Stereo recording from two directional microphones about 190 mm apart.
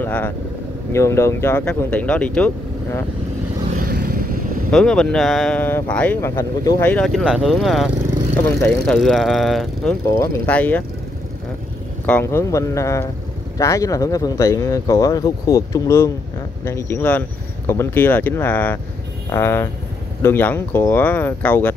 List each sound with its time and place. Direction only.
0.0 s speech: 10° left (ahead or behind)
4.6 s speech: 5° left (ahead or behind)
6.9 s speech: 5° left (ahead or behind)
12.1 s speech: 10° left (ahead or behind)